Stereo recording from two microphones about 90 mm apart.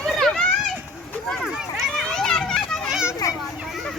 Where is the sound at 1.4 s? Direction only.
5° right (ahead or behind).